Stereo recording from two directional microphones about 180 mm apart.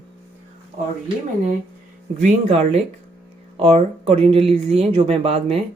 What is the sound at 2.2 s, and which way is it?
Speech, 40° right (ahead or behind).